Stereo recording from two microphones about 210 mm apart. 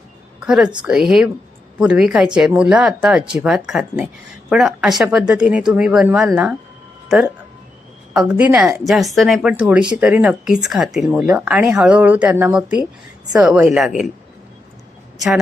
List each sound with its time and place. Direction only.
0.4 s speech: 5° right (ahead or behind)